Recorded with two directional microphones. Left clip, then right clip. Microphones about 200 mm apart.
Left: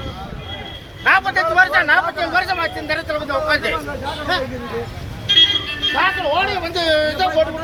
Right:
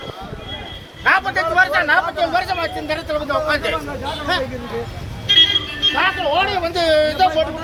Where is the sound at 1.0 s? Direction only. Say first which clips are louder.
Left 1 dB; 20° right (ahead or behind).